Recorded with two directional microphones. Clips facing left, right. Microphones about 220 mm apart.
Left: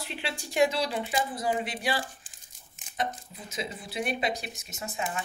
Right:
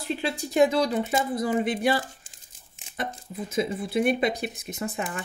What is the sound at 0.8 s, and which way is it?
Speech, 45° right (ahead or behind).